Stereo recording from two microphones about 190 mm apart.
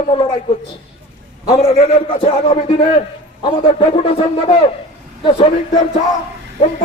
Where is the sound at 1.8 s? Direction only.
40° left (ahead or behind).